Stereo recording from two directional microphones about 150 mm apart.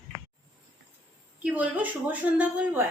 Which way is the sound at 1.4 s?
10° right (ahead or behind).